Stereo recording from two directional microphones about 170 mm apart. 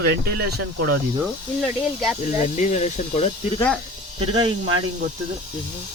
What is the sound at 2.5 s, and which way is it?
Speech, 45° left (ahead or behind).